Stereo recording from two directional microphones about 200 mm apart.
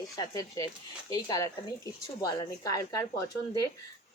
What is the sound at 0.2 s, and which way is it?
A woman's voice, 15° left (ahead or behind).